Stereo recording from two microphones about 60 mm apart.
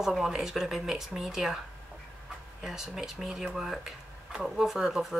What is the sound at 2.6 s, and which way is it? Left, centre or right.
Speech, centre.